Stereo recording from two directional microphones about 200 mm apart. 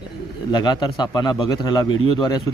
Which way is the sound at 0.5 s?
20° left (ahead or behind).